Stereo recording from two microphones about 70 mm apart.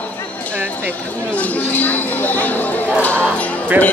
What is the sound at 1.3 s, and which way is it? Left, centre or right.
Speech, left.